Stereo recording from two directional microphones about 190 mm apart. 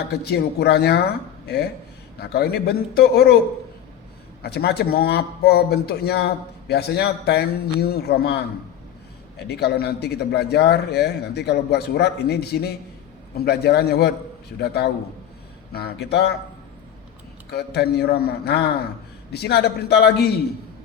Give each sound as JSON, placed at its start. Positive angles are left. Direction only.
{"t": 0.1, "sound": "speech", "side_deg": 60}
{"t": 4.4, "sound": "speech", "side_deg": 60}
{"t": 17.5, "sound": "speech", "side_deg": 60}